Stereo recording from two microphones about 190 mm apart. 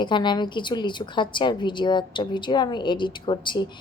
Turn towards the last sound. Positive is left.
turn(degrees=25)  # may be behind; listen again after turning